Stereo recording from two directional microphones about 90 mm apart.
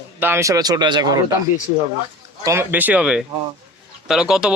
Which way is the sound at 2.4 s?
30° right (ahead or behind).